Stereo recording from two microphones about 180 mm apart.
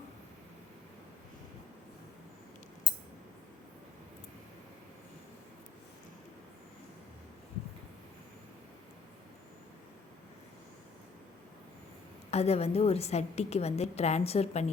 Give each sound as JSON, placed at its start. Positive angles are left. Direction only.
{"t": 12.3, "sound": "a woman's voice", "side_deg": 35}